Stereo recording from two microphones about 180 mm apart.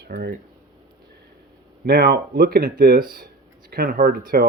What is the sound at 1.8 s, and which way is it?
Speech, 60° right (ahead or behind).